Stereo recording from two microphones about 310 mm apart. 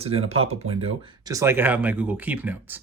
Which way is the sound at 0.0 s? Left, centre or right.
Centre.